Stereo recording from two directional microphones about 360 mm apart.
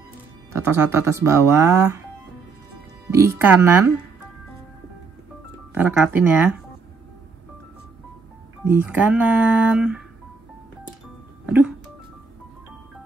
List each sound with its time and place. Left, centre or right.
0.5 s speech: centre
3.1 s speech: centre
5.8 s speech: centre
8.6 s speech: centre
11.4 s music: centre